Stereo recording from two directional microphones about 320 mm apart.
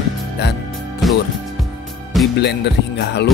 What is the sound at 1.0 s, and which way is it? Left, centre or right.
Speech, centre.